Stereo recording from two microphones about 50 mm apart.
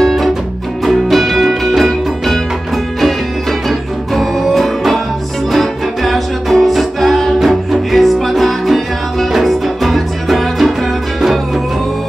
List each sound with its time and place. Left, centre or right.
0.0 s music: centre
3.6 s music: centre